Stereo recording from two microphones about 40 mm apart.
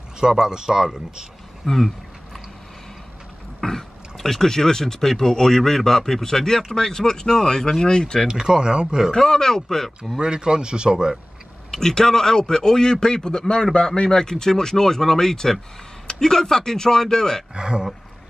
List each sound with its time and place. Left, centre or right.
0.5 s speech: centre
1.6 s speech: centre
3.6 s speech: centre
8.3 s speech: centre
9.1 s speech: centre
10.1 s speech: centre
11.7 s speech: centre
17.6 s speech: right